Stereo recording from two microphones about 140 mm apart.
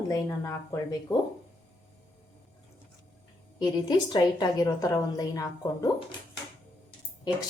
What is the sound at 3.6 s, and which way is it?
A woman's voice, 30° left (ahead or behind).